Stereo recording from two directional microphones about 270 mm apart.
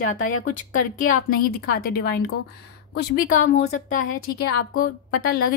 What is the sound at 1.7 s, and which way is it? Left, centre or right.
A woman's voice, left.